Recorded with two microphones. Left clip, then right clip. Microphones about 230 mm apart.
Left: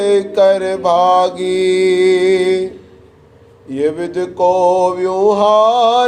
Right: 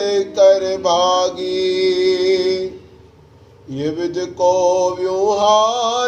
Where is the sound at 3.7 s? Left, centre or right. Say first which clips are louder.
Left 4 dB; left.